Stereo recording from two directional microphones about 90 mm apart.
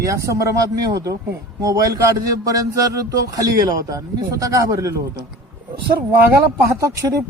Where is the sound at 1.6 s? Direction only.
40° right (ahead or behind).